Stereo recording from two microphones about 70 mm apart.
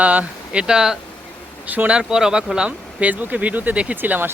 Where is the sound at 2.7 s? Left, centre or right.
Right.